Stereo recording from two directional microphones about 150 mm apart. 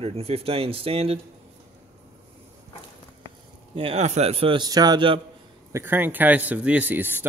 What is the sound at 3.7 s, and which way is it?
A man's voice, 40° right (ahead or behind).